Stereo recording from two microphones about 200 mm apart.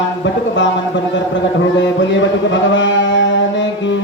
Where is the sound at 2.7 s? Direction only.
65° left (ahead or behind).